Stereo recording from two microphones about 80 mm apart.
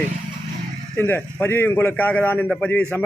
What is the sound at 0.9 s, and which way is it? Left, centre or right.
A man's voice, left.